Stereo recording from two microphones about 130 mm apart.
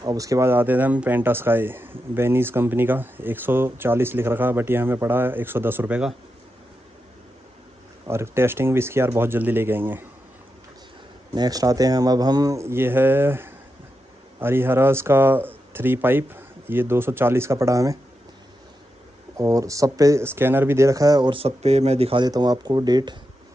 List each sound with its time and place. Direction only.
0.0 s speech: 25° right (ahead or behind); by 6.1 s 10° right (ahead or behind)
8.1 s speech: 20° right (ahead or behind)
11.3 s speech: 30° right (ahead or behind)
19.3 s speech: 25° right (ahead or behind)
21.3 s speech: 50° right (ahead or behind)
22.2 s speech: 30° right (ahead or behind)